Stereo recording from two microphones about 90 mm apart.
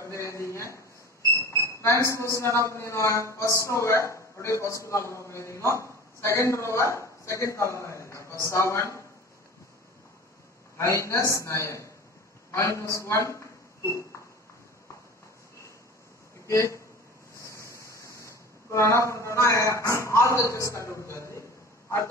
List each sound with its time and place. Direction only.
0.0 s a woman's voice: 30° left (ahead or behind)
10.8 s a man's voice: 30° left (ahead or behind)
16.4 s speech: 35° left (ahead or behind)
17.4 s a sound: 35° left (ahead or behind)
19.0 s a man's voice: 35° left (ahead or behind)